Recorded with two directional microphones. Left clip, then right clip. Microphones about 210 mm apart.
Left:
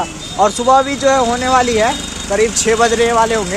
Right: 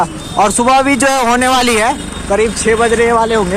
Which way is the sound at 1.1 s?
40° right (ahead or behind).